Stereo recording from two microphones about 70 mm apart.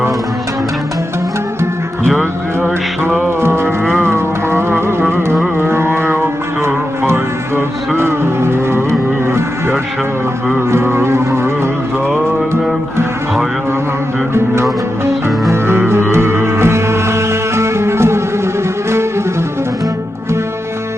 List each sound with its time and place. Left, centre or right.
3.2 s music: right
5.0 s a sound: right
5.5 s music: right
14.3 s music: right